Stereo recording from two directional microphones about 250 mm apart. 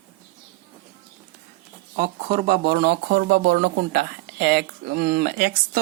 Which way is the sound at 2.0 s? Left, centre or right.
Right.